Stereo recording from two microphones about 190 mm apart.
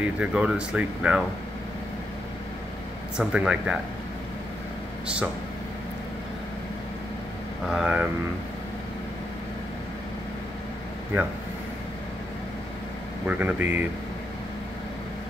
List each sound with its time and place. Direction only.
0.0 s speech: 5° right (ahead or behind)
3.2 s speech: 5° right (ahead or behind)
5.0 s speech: 5° right (ahead or behind)
7.7 s speech: 5° right (ahead or behind)
13.3 s speech: 10° right (ahead or behind)